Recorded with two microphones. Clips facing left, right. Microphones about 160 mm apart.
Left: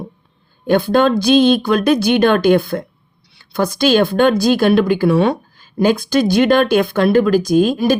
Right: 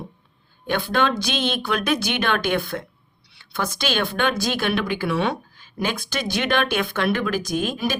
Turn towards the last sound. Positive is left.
turn(degrees=40)  # may be behind; listen again after turning